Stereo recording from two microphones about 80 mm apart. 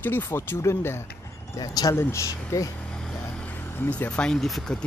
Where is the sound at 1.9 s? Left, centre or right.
Left.